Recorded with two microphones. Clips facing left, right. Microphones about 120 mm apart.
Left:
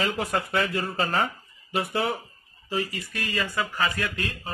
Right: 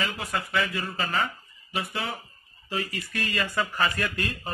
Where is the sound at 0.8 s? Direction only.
35° left (ahead or behind).